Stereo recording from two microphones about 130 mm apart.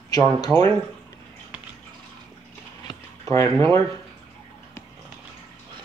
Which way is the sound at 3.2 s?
20° left (ahead or behind).